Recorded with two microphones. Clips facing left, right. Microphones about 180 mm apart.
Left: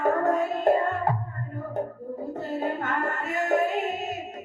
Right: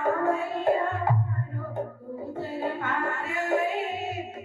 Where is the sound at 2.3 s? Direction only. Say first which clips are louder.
Left 1 dB; 40° left (ahead or behind).